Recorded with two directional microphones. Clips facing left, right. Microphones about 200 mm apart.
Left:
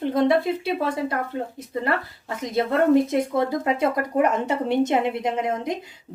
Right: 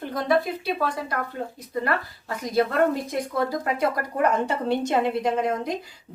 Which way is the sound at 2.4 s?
25° left (ahead or behind).